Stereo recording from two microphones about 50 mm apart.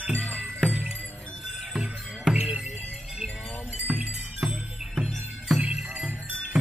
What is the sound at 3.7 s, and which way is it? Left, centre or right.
Music, right.